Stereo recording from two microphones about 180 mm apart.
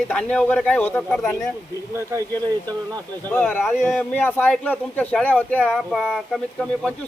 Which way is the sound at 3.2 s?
10° left (ahead or behind).